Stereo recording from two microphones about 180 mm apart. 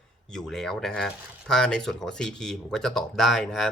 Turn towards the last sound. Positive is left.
turn(degrees=0)  # may be behind; listen again after turning